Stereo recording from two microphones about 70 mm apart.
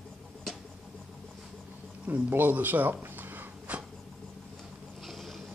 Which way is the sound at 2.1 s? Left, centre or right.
Right.